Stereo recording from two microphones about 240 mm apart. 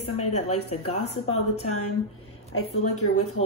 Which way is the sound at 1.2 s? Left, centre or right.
Left.